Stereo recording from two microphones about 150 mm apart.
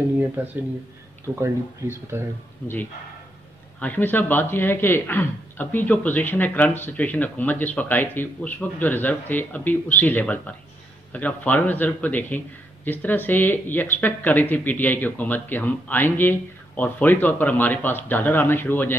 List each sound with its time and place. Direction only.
0.4 s speech: 10° right (ahead or behind)
3.8 s speech: 10° left (ahead or behind)